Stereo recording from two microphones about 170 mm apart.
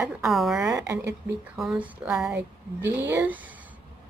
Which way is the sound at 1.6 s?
5° right (ahead or behind).